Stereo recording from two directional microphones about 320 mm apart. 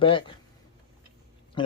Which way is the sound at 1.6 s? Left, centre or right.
Centre.